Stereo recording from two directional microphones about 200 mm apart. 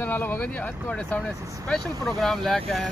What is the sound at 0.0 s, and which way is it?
Speech, 10° left (ahead or behind).